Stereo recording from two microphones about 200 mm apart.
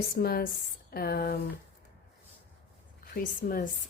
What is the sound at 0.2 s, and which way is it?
Speech, 50° left (ahead or behind).